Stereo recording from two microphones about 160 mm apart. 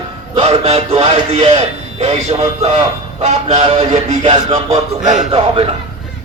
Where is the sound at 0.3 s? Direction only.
40° right (ahead or behind).